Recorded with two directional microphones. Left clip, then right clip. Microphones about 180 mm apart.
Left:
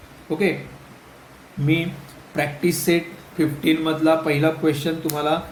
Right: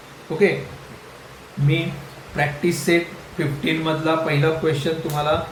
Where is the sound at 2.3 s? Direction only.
55° left (ahead or behind).